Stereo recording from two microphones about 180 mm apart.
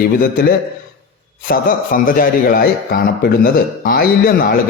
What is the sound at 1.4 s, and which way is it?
A man's voice, 50° left (ahead or behind).